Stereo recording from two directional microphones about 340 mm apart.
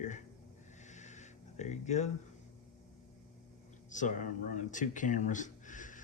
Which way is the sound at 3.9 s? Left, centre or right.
Left.